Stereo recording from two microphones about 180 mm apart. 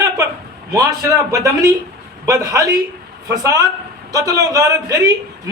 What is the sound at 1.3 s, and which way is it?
A man's voice, 20° right (ahead or behind).